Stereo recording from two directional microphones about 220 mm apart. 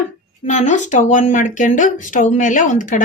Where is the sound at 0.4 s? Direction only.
35° left (ahead or behind).